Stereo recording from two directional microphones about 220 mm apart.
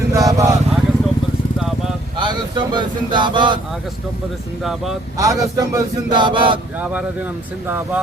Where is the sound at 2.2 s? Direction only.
20° right (ahead or behind).